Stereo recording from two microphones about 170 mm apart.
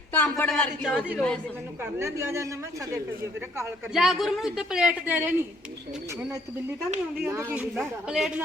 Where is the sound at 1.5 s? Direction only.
15° right (ahead or behind).